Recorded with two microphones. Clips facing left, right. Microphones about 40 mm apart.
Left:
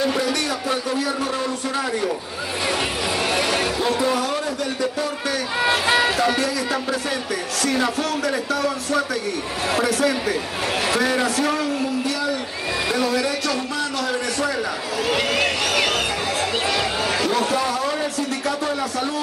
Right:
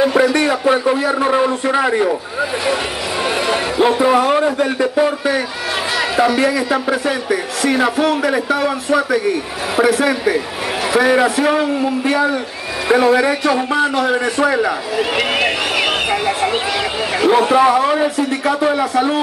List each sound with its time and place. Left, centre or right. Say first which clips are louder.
0.0 s a man's voice: right 8 dB; right
3.4 s a man's voice: right 6 dB; right
17.2 s speech: right 12 dB; right